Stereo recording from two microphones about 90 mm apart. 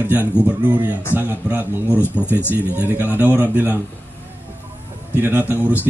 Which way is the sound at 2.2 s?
25° left (ahead or behind).